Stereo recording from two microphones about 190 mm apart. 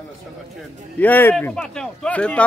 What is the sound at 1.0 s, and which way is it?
Speech, 10° left (ahead or behind).